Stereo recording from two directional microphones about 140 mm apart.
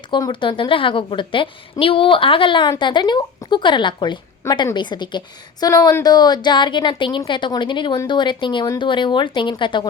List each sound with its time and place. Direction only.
0.1 s a woman's voice: 35° left (ahead or behind)